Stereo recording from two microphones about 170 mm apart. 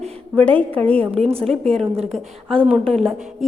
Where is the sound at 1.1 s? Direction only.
35° right (ahead or behind).